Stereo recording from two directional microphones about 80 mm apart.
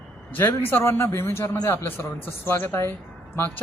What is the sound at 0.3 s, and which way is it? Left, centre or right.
A man's voice, left.